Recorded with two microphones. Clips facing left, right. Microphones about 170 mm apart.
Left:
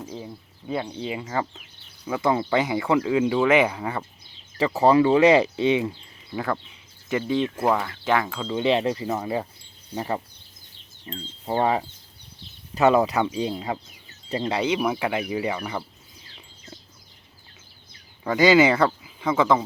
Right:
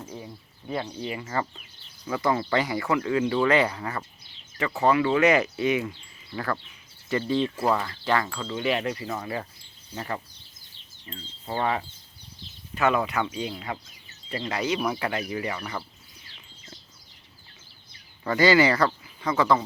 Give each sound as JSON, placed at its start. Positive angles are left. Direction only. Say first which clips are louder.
{"t": 0.9, "sound": "speech", "louder": "left 2 dB", "side_deg": 20}
{"t": 4.5, "sound": "speech", "louder": "left 5 dB", "side_deg": 30}
{"t": 6.3, "sound": "speech", "louder": "left 3 dB", "side_deg": 15}
{"t": 11.4, "sound": "speech", "louder": "left 5 dB", "side_deg": 25}
{"t": 14.7, "sound": "speech", "louder": "left 3 dB", "side_deg": 10}
{"t": 18.2, "sound": "speech", "louder": "left 3 dB", "side_deg": 15}
{"t": 18.9, "sound": "a sound", "louder": "left 3 dB", "side_deg": 5}